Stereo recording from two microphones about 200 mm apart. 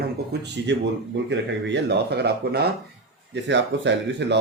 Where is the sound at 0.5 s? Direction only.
60° right (ahead or behind).